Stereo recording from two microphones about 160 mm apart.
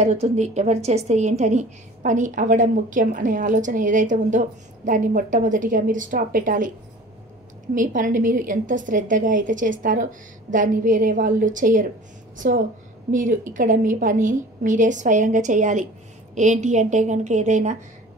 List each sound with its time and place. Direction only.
0.0 s a woman's voice: 45° right (ahead or behind)
7.7 s a woman's voice: 55° right (ahead or behind)